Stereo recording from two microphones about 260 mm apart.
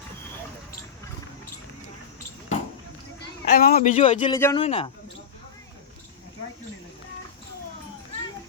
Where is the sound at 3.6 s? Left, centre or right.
Left.